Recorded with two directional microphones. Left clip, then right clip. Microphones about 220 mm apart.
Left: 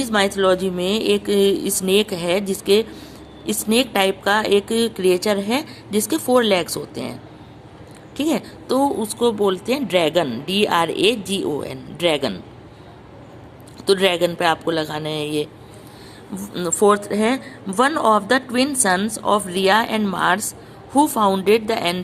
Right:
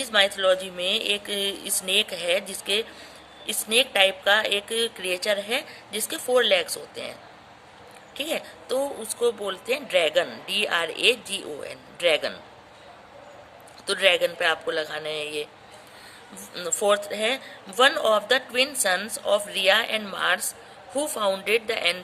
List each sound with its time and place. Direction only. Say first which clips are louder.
0.0 s speech: left 3 dB; 15° left (ahead or behind)
13.8 s speech: left 4 dB; 15° left (ahead or behind)
16.3 s speech: left 6 dB; 5° left (ahead or behind)